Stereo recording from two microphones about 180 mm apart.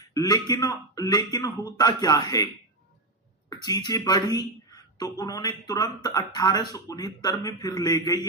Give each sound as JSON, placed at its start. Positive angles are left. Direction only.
{"t": 0.1, "sound": "speech", "side_deg": 20}
{"t": 3.6, "sound": "speech", "side_deg": 20}